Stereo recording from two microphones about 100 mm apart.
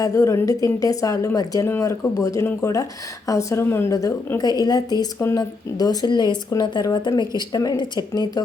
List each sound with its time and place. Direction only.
0.0 s speech: 35° left (ahead or behind)
4.4 s speech: 40° left (ahead or behind)